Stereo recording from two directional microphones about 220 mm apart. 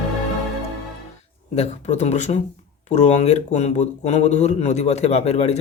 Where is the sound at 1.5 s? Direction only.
30° left (ahead or behind).